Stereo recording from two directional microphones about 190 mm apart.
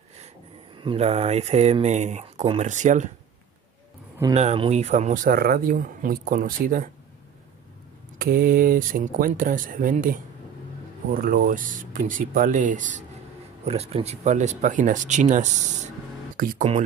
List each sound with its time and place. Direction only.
0.7 s speech: 30° right (ahead or behind)
4.3 s speech: 35° right (ahead or behind)
8.2 s speech: 50° right (ahead or behind)